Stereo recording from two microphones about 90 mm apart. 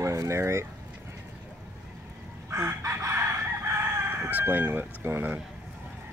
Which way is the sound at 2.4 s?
30° right (ahead or behind).